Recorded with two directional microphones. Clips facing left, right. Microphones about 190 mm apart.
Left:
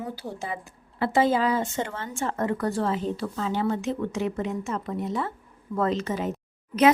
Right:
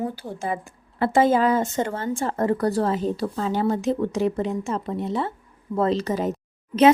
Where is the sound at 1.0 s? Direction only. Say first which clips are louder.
Right 4 dB; 50° right (ahead or behind).